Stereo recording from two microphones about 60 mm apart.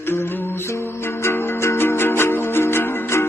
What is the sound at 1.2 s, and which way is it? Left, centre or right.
Music, left.